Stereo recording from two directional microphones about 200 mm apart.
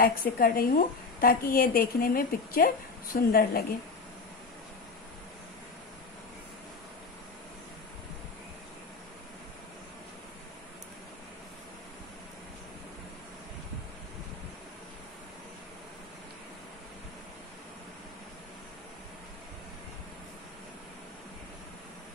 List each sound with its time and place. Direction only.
0.0 s a woman's voice: 45° left (ahead or behind)